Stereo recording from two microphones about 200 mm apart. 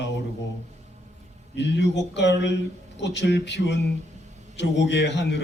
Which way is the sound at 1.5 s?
60° left (ahead or behind).